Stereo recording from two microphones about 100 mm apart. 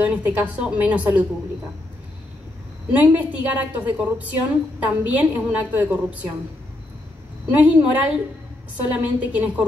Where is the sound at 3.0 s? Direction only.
15° right (ahead or behind).